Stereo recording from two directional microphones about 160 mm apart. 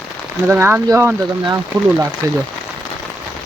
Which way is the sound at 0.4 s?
15° right (ahead or behind).